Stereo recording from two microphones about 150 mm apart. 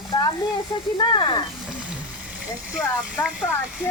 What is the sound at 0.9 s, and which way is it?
Speech, 30° left (ahead or behind).